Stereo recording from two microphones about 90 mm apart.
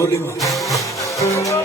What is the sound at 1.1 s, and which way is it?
Music, 35° left (ahead or behind).